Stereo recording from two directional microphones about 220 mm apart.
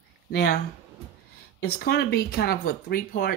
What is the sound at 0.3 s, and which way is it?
Speech, 45° left (ahead or behind).